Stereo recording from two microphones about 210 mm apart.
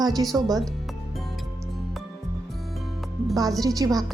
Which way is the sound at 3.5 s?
15° right (ahead or behind).